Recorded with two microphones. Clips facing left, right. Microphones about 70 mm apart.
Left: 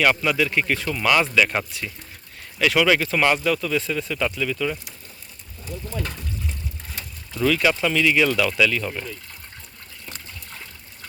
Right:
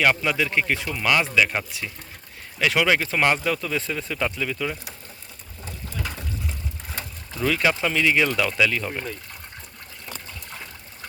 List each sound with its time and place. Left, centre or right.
0.0 s a man's voice: centre
2.6 s speech: right
7.4 s speech: right